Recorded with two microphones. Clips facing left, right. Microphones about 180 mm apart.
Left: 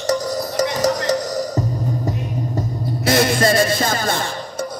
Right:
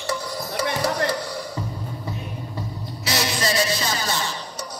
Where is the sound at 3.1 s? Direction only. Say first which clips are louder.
Left 9 dB; 50° left (ahead or behind).